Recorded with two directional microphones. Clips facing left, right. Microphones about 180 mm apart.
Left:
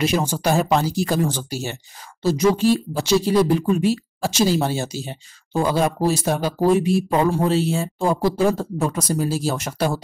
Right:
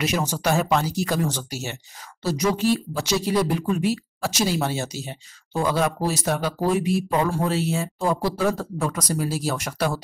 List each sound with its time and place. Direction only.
0.0 s speech: 30° left (ahead or behind)